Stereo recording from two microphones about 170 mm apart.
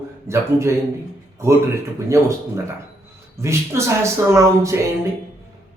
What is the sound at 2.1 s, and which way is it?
Speech, 15° right (ahead or behind).